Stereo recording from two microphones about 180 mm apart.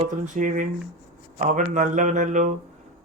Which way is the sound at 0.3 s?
45° right (ahead or behind).